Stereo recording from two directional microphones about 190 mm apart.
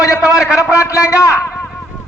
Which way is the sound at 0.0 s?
15° left (ahead or behind).